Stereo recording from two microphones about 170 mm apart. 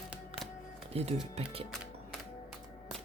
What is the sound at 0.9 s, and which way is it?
Speech, 35° right (ahead or behind).